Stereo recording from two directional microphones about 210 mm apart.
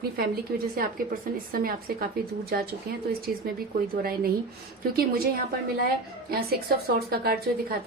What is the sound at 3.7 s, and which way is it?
Speech, 45° right (ahead or behind).